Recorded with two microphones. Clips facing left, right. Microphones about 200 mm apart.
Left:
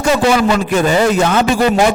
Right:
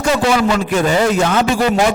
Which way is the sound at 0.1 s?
20° left (ahead or behind).